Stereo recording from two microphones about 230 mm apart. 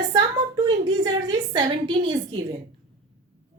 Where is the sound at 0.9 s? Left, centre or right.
Centre.